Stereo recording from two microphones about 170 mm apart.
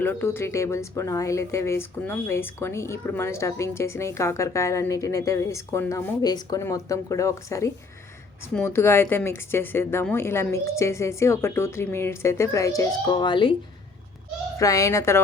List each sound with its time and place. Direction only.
0.0 s speech: 10° left (ahead or behind); by 13.5 s 30° left (ahead or behind)
14.6 s speech: 20° left (ahead or behind)